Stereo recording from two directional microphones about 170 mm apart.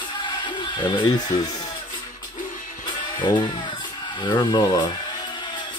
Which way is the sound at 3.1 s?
25° left (ahead or behind).